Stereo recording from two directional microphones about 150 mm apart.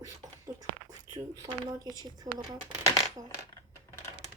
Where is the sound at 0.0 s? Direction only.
20° right (ahead or behind).